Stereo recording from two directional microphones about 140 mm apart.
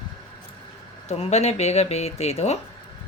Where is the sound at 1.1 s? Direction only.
50° left (ahead or behind).